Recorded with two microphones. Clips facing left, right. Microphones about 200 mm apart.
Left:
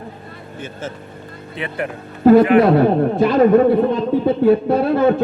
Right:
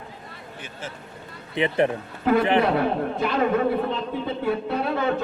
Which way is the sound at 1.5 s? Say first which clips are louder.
Right 4 dB; 20° right (ahead or behind).